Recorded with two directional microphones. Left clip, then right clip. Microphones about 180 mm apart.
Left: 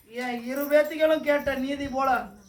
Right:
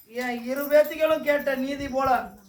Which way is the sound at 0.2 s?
20° right (ahead or behind).